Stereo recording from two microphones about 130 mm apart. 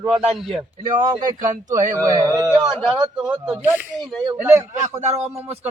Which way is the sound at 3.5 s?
15° right (ahead or behind).